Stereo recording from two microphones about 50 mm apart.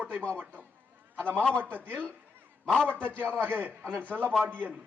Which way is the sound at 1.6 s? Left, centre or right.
Right.